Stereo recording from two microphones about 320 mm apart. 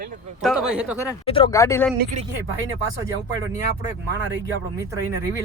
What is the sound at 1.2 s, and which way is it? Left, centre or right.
Speech, centre.